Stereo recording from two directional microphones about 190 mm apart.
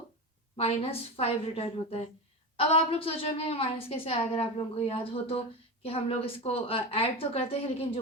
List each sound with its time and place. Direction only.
0.5 s a woman's voice: 30° left (ahead or behind)